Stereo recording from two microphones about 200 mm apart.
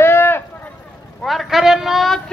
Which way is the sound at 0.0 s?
10° left (ahead or behind).